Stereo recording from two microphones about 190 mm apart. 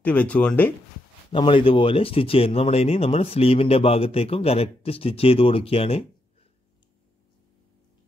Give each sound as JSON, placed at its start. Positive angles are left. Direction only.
{"t": 0.0, "sound": "speech", "side_deg": 5}
{"t": 1.3, "sound": "speech", "side_deg": 25}